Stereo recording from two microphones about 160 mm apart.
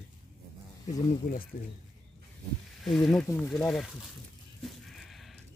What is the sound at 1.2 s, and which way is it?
Speech, 55° left (ahead or behind).